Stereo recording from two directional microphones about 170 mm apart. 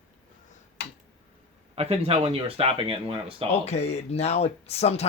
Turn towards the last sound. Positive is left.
turn(degrees=40)  # may be behind; listen again after turning